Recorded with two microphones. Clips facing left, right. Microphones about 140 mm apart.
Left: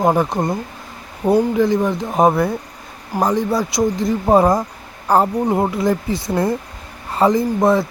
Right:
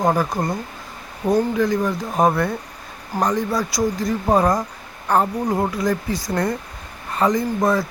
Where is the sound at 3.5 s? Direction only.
25° left (ahead or behind).